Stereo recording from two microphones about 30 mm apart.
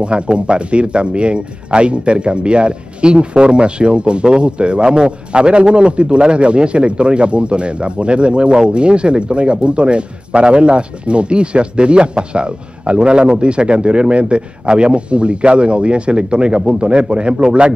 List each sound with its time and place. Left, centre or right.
0.0 s speech: right